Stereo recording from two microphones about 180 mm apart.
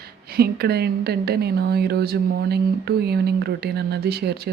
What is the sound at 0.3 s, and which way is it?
Speech, 60° right (ahead or behind).